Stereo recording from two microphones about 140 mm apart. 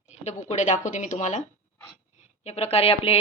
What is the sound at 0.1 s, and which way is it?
Speech, 55° left (ahead or behind).